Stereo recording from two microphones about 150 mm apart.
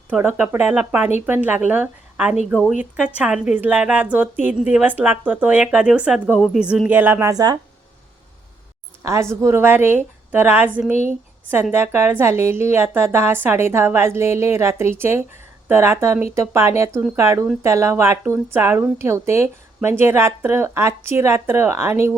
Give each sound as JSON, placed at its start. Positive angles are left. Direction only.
{"t": 0.1, "sound": "speech", "side_deg": -10}
{"t": 9.3, "sound": "speech", "side_deg": -20}
{"t": 11.7, "sound": "speech", "side_deg": -15}